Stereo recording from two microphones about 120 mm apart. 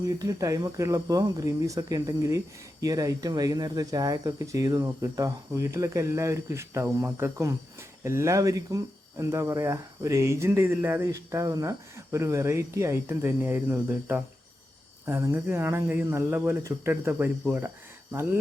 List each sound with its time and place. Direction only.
0.0 s speech: 30° right (ahead or behind)